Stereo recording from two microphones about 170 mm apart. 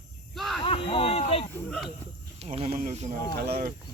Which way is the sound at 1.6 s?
Centre (ahead or behind).